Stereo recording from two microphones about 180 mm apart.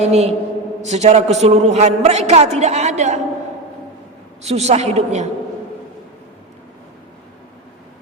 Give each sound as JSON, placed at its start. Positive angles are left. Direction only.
{"t": 0.0, "sound": "a man's voice", "side_deg": -35}
{"t": 4.4, "sound": "a man's voice", "side_deg": -35}